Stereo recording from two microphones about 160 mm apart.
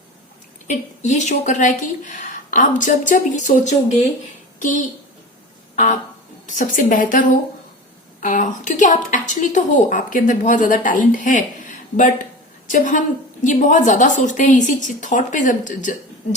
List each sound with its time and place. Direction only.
0.7 s a woman's voice: 45° left (ahead or behind)
5.7 s music: 50° left (ahead or behind)
6.4 s a woman's voice: 55° left (ahead or behind)